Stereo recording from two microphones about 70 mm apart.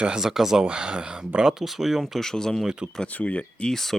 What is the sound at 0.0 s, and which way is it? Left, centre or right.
Speech, centre.